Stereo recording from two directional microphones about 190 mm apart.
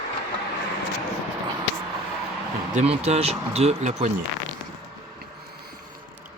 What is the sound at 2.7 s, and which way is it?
Speech, 35° right (ahead or behind).